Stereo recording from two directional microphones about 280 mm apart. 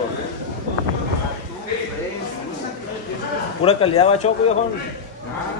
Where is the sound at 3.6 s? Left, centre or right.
Centre.